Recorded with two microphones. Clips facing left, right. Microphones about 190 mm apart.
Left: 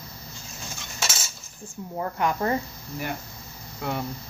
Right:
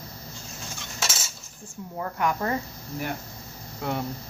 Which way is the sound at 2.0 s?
25° left (ahead or behind).